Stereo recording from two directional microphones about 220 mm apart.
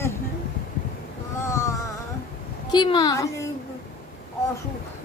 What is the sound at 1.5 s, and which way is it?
Music, 15° left (ahead or behind).